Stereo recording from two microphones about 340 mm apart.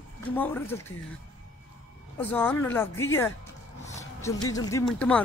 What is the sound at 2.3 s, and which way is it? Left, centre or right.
Speech, centre.